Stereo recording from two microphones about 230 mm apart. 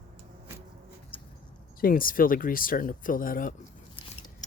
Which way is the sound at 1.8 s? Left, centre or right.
Left.